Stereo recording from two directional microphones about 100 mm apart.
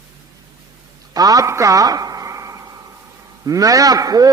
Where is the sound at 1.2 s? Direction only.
35° right (ahead or behind).